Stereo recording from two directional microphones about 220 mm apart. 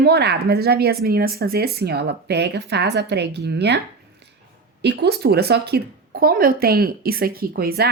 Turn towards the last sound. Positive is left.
turn(degrees=-45)  # may be behind; listen again after turning